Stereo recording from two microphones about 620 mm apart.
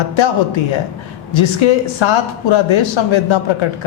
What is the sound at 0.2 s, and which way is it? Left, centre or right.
Speech, left.